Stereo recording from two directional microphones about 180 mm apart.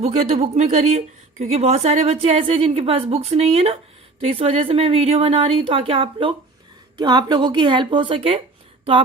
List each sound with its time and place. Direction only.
0.0 s a woman's voice: 35° right (ahead or behind)